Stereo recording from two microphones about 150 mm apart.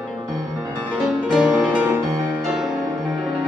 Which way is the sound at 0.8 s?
5° right (ahead or behind).